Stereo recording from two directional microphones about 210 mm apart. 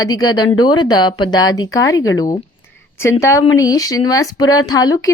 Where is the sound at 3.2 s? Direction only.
15° left (ahead or behind).